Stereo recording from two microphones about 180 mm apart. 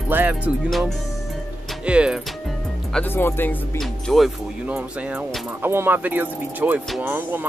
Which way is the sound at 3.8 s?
Centre (ahead or behind).